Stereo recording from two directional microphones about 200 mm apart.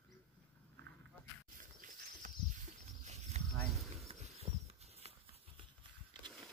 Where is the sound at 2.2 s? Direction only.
40° right (ahead or behind).